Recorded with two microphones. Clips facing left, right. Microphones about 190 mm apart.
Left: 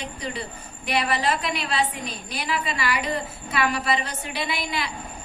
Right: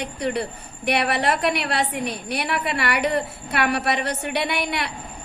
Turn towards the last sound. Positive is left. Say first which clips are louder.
# right 3 dB
turn(degrees=-65)  # may be behind; listen again after turning